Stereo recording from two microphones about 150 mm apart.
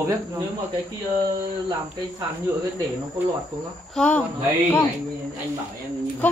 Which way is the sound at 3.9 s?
10° left (ahead or behind).